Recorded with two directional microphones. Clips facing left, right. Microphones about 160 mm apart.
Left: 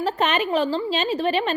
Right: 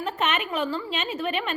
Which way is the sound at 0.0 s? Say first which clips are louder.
Left 5 dB; 35° left (ahead or behind).